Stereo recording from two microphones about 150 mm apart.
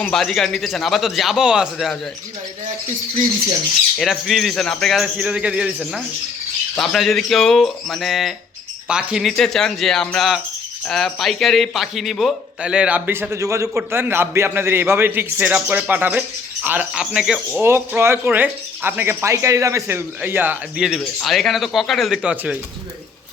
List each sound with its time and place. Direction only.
0.0 s speech: 5° left (ahead or behind)
3.9 s speech: centre (ahead or behind)
17.6 s speech: 15° right (ahead or behind)